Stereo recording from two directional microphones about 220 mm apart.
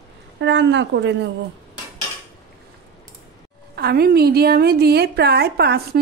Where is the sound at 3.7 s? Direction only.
45° right (ahead or behind).